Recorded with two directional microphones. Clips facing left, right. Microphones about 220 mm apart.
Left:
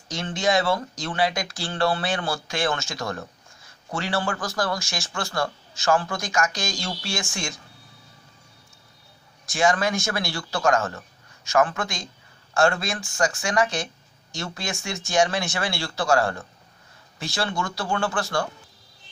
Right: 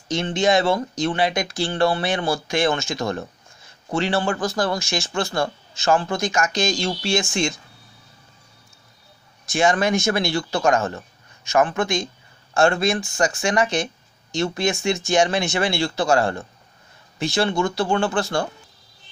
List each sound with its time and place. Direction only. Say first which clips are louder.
0.1 s speech: right 4 dB; 25° right (ahead or behind)
9.5 s speech: right 3 dB; 20° right (ahead or behind)